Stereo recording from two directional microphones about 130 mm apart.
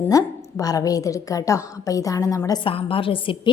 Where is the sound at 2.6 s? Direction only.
45° left (ahead or behind).